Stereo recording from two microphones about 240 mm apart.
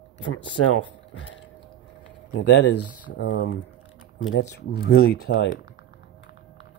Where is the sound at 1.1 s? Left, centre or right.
Left.